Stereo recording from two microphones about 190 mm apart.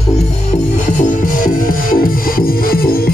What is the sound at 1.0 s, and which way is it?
Music, 45° left (ahead or behind).